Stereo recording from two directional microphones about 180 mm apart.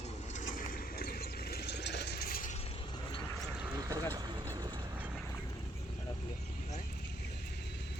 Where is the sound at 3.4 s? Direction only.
15° right (ahead or behind).